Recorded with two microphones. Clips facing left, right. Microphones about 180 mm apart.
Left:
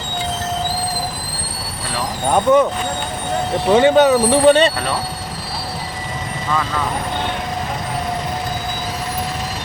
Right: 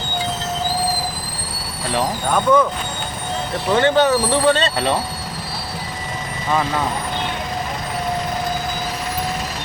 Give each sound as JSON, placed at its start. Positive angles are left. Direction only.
{"t": 2.3, "sound": "speech", "side_deg": 25}
{"t": 3.8, "sound": "speech", "side_deg": 15}